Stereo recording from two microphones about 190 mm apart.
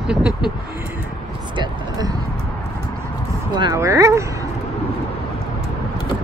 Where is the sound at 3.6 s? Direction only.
15° right (ahead or behind).